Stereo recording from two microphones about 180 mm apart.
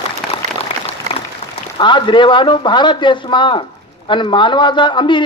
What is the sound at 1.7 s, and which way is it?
A man's voice, 25° left (ahead or behind).